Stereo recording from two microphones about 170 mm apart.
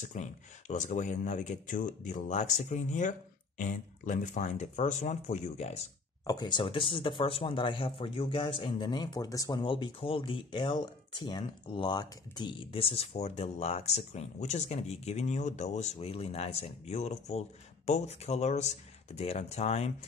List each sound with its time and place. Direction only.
0.1 s speech: 45° left (ahead or behind)
6.2 s speech: 25° left (ahead or behind)